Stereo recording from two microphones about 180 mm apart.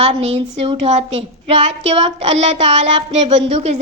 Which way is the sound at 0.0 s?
35° right (ahead or behind).